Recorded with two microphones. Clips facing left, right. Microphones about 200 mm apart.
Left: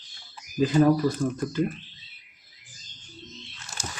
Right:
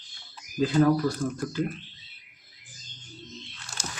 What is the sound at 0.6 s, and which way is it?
Speech, 15° left (ahead or behind).